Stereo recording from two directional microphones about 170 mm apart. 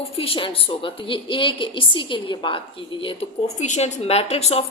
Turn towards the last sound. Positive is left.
turn(degrees=35)  # may be behind; listen again after turning